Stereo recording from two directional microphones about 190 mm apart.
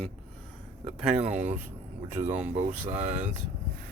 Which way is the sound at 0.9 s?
35° right (ahead or behind).